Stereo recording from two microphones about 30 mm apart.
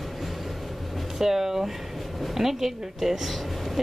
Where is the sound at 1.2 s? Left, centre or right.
Centre.